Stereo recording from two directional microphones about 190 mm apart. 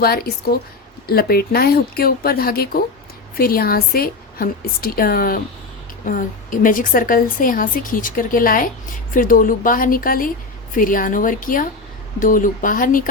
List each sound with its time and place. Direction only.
0.0 s a woman's voice: 55° left (ahead or behind)